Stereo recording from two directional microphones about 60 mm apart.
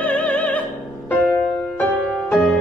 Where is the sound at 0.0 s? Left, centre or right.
Left.